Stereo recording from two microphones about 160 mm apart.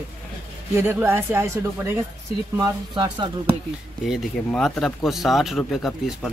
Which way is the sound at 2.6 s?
30° right (ahead or behind).